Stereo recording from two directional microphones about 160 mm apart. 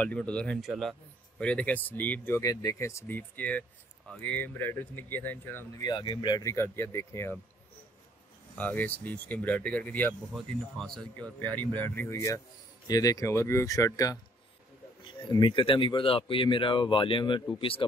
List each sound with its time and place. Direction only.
0.0 s speech: 5° left (ahead or behind)
8.5 s speech: 10° left (ahead or behind); by 17.8 s 35° left (ahead or behind)